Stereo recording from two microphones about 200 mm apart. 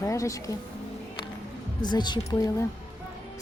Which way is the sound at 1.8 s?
20° left (ahead or behind).